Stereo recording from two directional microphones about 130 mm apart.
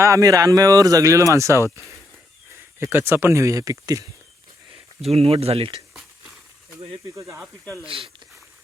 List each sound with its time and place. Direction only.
0.0 s speech: 25° right (ahead or behind)
5.0 s speech: 50° right (ahead or behind)
6.7 s speech: 25° right (ahead or behind)
7.6 s speech: 15° left (ahead or behind)
7.9 s speech: 45° right (ahead or behind)